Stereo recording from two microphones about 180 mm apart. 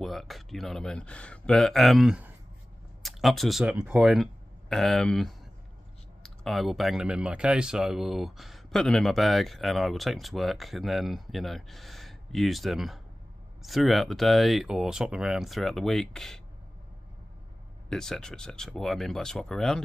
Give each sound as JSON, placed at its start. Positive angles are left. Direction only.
{"t": 0.0, "sound": "speech", "side_deg": 0}
{"t": 17.8, "sound": "speech", "side_deg": 5}